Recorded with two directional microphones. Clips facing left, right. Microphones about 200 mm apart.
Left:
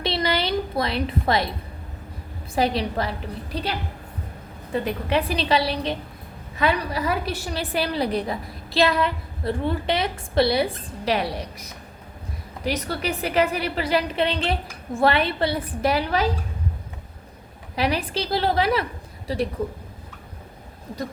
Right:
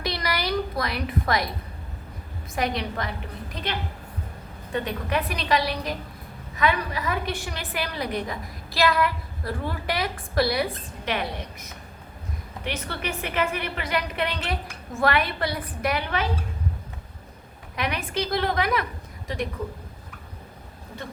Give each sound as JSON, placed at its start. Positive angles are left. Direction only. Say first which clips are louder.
{"t": 0.0, "sound": "a sound", "louder": "left 4 dB", "side_deg": 25}
{"t": 2.6, "sound": "a woman's voice", "louder": "left 5 dB", "side_deg": 30}
{"t": 17.7, "sound": "a woman's voice", "louder": "left 4 dB", "side_deg": 30}